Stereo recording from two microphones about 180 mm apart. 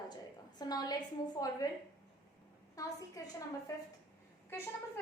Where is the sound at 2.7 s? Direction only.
20° left (ahead or behind).